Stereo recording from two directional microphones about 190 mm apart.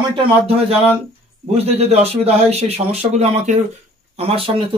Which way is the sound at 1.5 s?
35° right (ahead or behind).